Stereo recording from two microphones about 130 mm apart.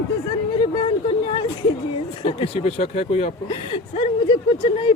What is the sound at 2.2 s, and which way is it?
A woman's voice, 50° left (ahead or behind).